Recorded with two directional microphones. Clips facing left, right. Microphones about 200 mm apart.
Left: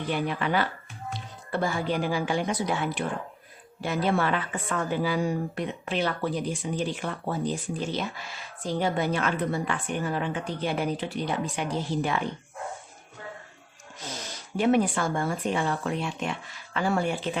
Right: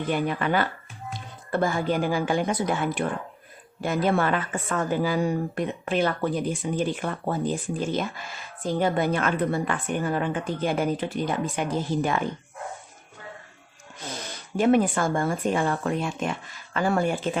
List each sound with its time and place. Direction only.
0.1 s a woman's voice: 50° right (ahead or behind)
14.1 s a woman's voice: 50° right (ahead or behind)